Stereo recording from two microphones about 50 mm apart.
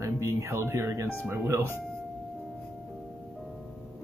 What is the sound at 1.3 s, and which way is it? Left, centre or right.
Speech, right.